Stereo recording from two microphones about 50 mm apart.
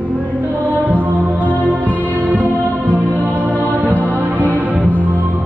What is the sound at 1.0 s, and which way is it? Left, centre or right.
Music, right.